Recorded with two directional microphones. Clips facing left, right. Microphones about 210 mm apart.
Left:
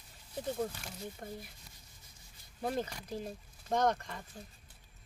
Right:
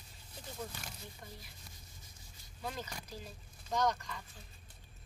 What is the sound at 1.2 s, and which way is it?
Speech, 50° left (ahead or behind).